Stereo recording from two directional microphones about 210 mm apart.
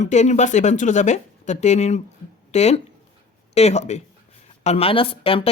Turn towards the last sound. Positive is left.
turn(degrees=25)  # may be behind; listen again after turning